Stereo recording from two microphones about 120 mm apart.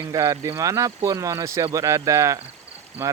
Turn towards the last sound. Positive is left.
turn(degrees=-25)  # may be behind; listen again after turning